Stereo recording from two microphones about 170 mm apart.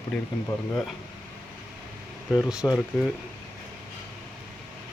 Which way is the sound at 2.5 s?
5° right (ahead or behind).